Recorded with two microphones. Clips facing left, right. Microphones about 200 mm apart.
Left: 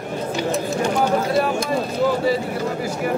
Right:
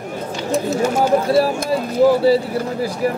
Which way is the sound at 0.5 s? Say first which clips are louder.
Right 8 dB; 5° right (ahead or behind).